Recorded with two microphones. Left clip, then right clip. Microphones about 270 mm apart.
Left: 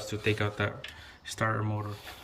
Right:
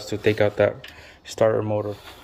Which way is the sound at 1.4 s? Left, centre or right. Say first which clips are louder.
Right 12 dB; left.